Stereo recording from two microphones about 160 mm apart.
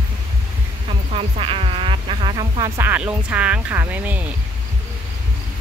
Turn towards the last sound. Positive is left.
turn(degrees=-10)  # may be behind; listen again after turning